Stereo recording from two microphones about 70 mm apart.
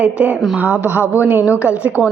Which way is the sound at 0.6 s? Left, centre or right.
Right.